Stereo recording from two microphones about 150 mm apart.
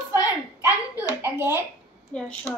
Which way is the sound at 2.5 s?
15° left (ahead or behind).